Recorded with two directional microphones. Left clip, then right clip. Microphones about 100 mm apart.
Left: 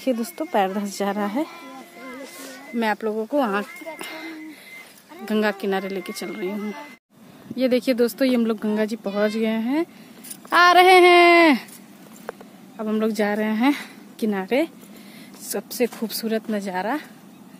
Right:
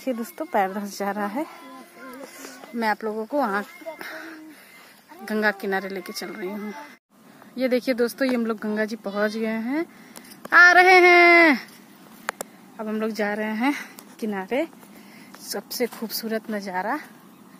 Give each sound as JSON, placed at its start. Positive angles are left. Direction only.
{"t": 0.4, "sound": "a woman's voice", "side_deg": 15}
{"t": 1.2, "sound": "a woman's voice", "side_deg": 35}
{"t": 2.7, "sound": "speech", "side_deg": 0}
{"t": 5.2, "sound": "speech", "side_deg": 5}
{"t": 6.2, "sound": "a woman's voice", "side_deg": 20}
{"t": 7.5, "sound": "a woman's voice", "side_deg": 5}
{"t": 12.8, "sound": "a woman's voice", "side_deg": 35}
{"t": 15.4, "sound": "speech", "side_deg": 55}
{"t": 15.8, "sound": "speech", "side_deg": 0}
{"t": 16.3, "sound": "a woman's voice", "side_deg": 10}